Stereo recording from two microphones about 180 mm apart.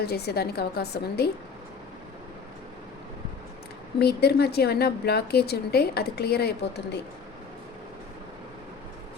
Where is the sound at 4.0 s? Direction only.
60° left (ahead or behind).